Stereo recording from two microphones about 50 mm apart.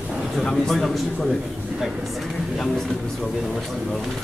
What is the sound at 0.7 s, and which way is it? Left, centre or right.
Speech, centre.